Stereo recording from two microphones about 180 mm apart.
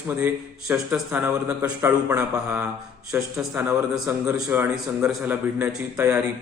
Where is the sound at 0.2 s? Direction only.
10° right (ahead or behind).